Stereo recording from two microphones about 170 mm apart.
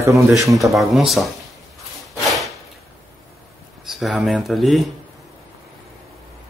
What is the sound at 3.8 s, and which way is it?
Speech, centre (ahead or behind).